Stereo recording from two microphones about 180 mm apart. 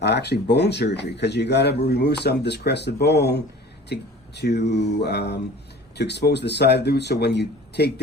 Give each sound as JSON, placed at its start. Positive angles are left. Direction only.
{"t": 0.0, "sound": "speech", "side_deg": 65}